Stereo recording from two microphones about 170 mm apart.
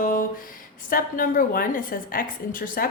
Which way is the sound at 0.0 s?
55° left (ahead or behind).